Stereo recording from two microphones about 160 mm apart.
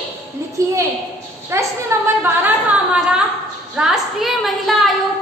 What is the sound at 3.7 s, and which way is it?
A woman's voice, 5° right (ahead or behind).